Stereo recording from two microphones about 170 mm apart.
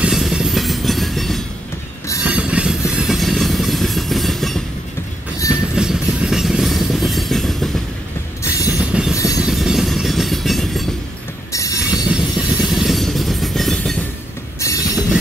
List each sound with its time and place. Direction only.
0.0 s train: centre (ahead or behind)
8.5 s train: 20° left (ahead or behind)
8.7 s train: 5° right (ahead or behind)
9.1 s train: 20° left (ahead or behind)
9.4 s train: 5° right (ahead or behind)
11.5 s train: 20° left (ahead or behind)
12.1 s train: 5° right (ahead or behind)
14.6 s train: 20° left (ahead or behind)